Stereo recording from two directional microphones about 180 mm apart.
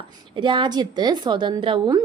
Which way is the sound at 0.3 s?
25° right (ahead or behind).